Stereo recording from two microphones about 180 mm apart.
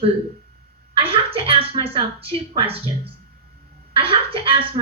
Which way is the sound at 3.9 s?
30° right (ahead or behind).